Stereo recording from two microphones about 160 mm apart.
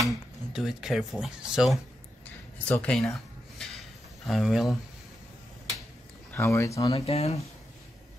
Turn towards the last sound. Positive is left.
turn(degrees=40)  # may be behind; listen again after turning